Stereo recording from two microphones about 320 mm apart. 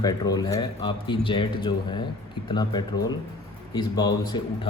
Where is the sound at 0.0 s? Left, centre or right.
Centre.